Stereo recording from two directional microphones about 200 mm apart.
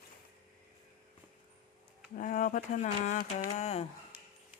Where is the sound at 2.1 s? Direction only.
40° left (ahead or behind).